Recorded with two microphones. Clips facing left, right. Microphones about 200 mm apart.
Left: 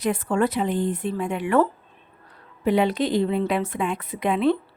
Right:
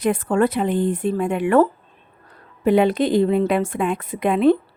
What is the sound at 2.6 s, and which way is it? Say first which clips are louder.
A woman's voice: right 4 dB; 50° right (ahead or behind).